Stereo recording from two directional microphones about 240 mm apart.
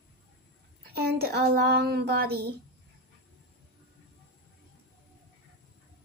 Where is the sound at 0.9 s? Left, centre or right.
Right.